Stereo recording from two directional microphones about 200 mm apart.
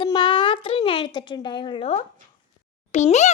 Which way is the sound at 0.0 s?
25° left (ahead or behind).